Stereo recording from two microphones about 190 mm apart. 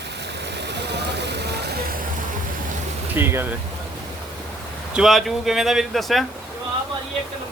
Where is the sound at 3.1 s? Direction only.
10° right (ahead or behind).